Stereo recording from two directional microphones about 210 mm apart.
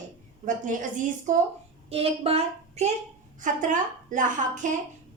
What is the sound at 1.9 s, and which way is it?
A woman's voice, 25° right (ahead or behind).